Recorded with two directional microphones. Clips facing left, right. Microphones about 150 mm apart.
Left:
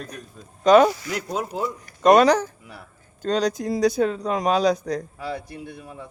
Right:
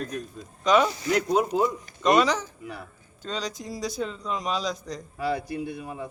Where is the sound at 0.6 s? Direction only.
40° left (ahead or behind).